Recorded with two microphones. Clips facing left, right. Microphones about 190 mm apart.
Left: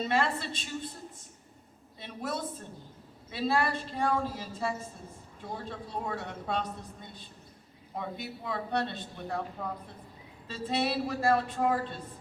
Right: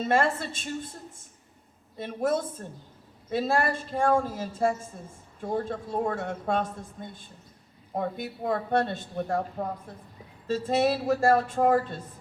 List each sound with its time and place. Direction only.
0.0 s a woman's voice: 45° right (ahead or behind)
2.0 s a woman's voice: 50° right (ahead or behind)